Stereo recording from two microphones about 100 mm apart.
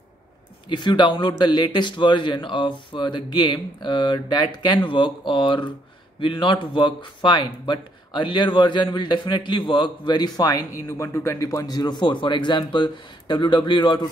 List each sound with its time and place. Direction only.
0.7 s a man's voice: 50° left (ahead or behind)